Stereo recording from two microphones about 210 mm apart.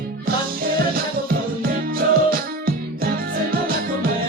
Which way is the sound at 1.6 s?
45° right (ahead or behind).